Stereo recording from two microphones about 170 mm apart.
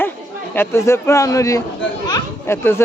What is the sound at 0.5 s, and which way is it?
A man's voice, 15° left (ahead or behind).